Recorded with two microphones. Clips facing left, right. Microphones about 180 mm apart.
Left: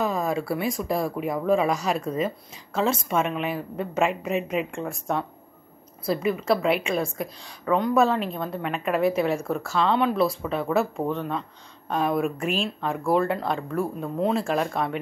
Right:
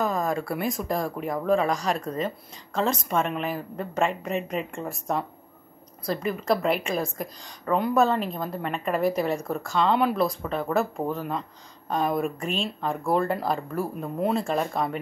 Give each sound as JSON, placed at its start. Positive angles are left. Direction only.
{"t": 0.0, "sound": "a woman's voice", "side_deg": 5}